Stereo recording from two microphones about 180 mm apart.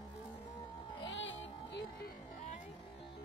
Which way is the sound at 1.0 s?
90° left.